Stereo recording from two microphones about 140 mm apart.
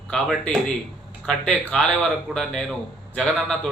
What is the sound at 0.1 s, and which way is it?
A man's voice, centre (ahead or behind).